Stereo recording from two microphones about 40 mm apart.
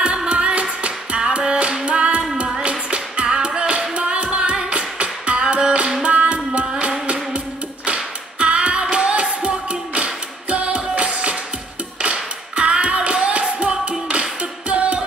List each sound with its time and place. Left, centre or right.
0.0 s music: right
7.1 s female singing: right
8.9 s music: right
12.0 s a sound: right